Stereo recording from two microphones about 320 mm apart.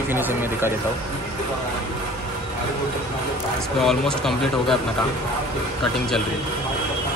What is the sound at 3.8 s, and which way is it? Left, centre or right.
Speech, centre.